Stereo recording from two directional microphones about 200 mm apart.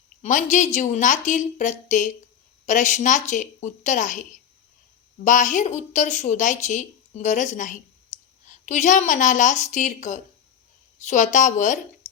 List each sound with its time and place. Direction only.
0.2 s a woman's voice: 40° left (ahead or behind)
8.1 s clicking: 35° left (ahead or behind)
8.6 s a woman's voice: 40° left (ahead or behind)